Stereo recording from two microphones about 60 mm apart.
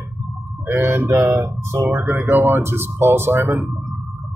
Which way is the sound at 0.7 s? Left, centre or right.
Right.